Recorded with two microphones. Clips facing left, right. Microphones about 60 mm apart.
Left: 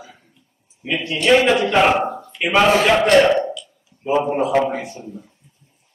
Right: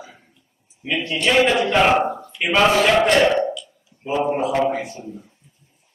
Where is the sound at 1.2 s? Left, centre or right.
Centre.